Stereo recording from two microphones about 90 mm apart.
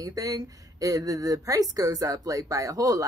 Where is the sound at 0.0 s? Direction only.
40° right (ahead or behind).